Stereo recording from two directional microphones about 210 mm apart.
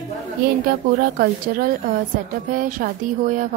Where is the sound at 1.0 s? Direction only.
45° right (ahead or behind).